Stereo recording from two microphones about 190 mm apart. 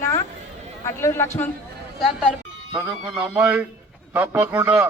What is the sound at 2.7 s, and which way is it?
Speech, 20° right (ahead or behind).